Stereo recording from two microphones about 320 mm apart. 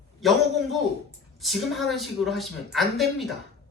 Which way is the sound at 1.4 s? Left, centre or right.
Centre.